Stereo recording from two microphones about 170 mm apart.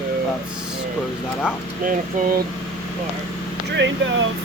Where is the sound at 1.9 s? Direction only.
55° right (ahead or behind).